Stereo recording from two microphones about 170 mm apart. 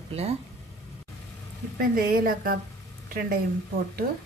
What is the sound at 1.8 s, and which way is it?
Speech, 60° right (ahead or behind).